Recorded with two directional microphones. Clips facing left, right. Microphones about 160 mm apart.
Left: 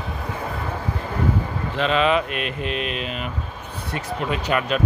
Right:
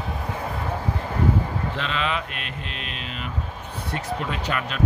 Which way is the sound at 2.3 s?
10° left (ahead or behind).